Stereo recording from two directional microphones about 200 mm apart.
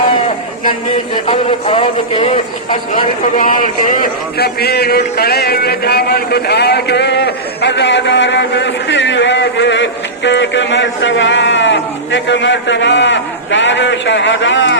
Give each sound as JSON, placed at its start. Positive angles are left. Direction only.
{"t": 1.1, "sound": "a man's voice", "side_deg": 30}